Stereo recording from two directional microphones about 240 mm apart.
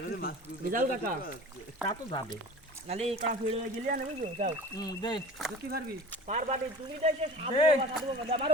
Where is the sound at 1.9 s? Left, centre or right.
Centre.